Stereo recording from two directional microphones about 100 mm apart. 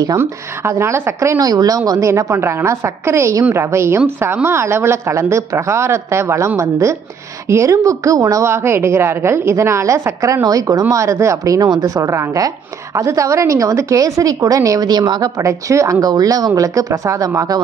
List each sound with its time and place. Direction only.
0.2 s a woman's voice: 25° right (ahead or behind)
1.4 s a woman's voice: 40° right (ahead or behind)